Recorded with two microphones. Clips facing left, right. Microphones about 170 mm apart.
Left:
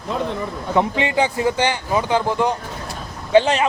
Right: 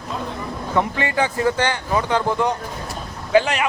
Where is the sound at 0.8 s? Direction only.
20° left (ahead or behind).